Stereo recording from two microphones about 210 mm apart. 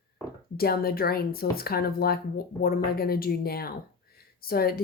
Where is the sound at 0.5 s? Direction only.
45° left (ahead or behind).